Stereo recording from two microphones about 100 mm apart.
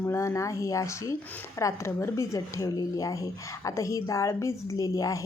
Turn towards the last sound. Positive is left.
turn(degrees=35)  # may be behind; listen again after turning